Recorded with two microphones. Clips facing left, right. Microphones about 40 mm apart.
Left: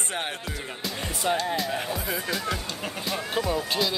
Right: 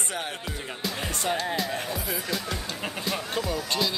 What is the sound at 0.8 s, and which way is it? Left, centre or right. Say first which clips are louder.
Music: left 1 dB; centre.